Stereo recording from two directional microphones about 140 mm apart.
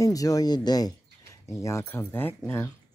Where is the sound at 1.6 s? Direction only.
15° left (ahead or behind).